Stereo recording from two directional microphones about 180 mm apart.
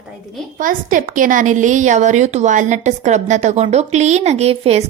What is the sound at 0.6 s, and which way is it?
A woman's voice, 50° right (ahead or behind).